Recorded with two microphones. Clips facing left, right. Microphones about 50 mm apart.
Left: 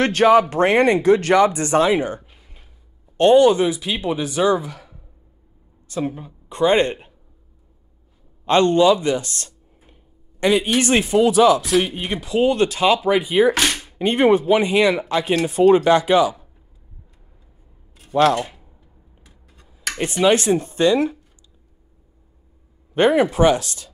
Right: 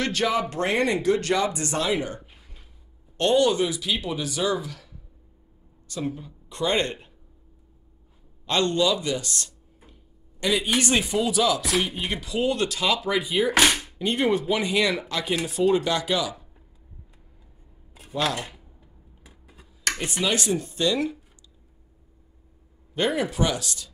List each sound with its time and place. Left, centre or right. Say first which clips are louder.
0.0 s speech: left 10 dB; left
8.5 s speech: left 8 dB; left
11.8 s speech: left 4 dB; left
13.5 s speech: left 1 dB; centre
13.9 s speech: left 8 dB; left
18.1 s speech: left 11 dB; left
19.2 s a sound: right 3 dB; centre
20.0 s speech: left 11 dB; left
22.9 s speech: left 9 dB; left